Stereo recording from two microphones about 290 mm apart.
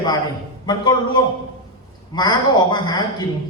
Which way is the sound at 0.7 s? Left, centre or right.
Centre.